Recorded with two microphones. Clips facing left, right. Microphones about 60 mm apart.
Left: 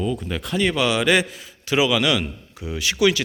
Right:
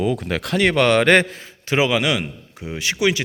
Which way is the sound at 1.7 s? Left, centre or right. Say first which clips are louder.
Right 1 dB; right.